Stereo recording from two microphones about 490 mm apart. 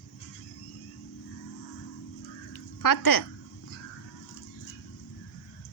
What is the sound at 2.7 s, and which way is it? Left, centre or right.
Speech, left.